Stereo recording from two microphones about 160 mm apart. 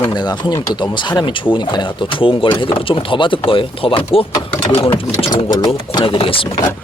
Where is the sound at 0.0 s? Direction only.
25° left (ahead or behind).